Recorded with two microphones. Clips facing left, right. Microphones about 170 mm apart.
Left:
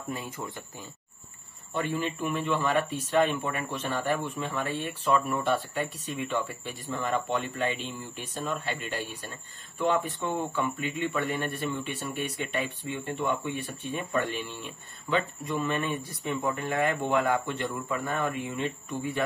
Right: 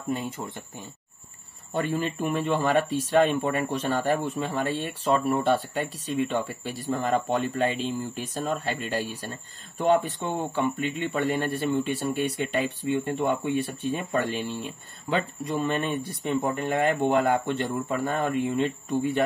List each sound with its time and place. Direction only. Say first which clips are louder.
0.1 s speech: right 6 dB; 25° right (ahead or behind)
1.7 s speech: right 3 dB; 40° right (ahead or behind)